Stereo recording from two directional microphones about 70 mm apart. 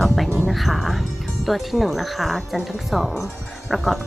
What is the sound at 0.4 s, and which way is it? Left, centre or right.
Music, centre.